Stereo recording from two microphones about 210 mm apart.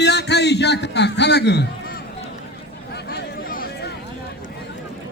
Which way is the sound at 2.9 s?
50° left (ahead or behind).